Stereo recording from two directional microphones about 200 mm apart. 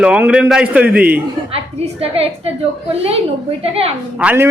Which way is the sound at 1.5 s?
30° right (ahead or behind).